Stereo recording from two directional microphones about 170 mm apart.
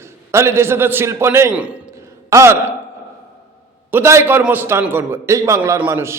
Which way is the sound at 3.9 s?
15° right (ahead or behind).